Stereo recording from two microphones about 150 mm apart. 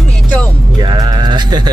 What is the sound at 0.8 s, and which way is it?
Sheep, 30° right (ahead or behind).